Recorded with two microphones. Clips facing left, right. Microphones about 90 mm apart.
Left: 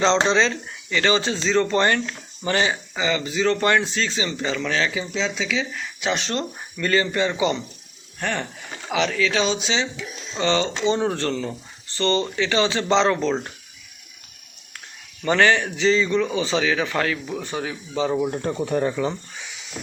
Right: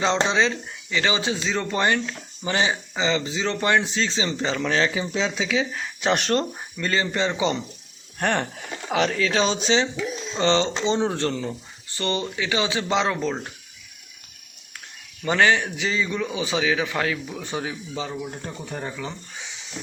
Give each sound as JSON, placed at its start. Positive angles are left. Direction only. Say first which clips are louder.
{"t": 0.0, "sound": "speech", "louder": "left 3 dB", "side_deg": -10}
{"t": 5.1, "sound": "speech", "louder": "right 1 dB", "side_deg": -10}
{"t": 6.0, "sound": "speech", "louder": "right 3 dB", "side_deg": -50}
{"t": 6.4, "sound": "speech", "louder": "left 1 dB", "side_deg": -20}
{"t": 8.2, "sound": "speech", "louder": "right 3 dB", "side_deg": -55}
{"t": 8.9, "sound": "speech", "louder": "even", "side_deg": -40}
{"t": 15.2, "sound": "speech", "louder": "left 2 dB", "side_deg": -10}
{"t": 18.2, "sound": "speech", "louder": "left 9 dB", "side_deg": 55}